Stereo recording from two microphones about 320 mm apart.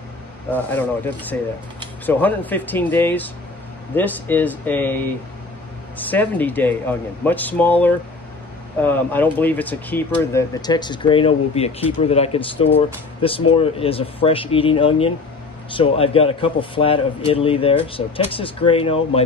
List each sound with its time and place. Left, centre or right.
0.5 s speech: centre